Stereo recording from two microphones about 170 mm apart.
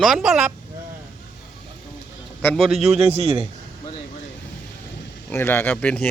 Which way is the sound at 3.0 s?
35° right (ahead or behind).